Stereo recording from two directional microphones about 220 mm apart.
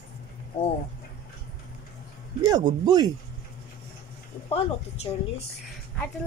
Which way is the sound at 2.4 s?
15° right (ahead or behind).